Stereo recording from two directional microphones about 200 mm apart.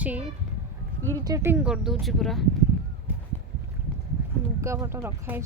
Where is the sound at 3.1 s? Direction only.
10° right (ahead or behind).